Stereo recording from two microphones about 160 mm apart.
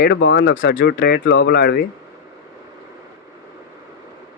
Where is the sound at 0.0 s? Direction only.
90° left.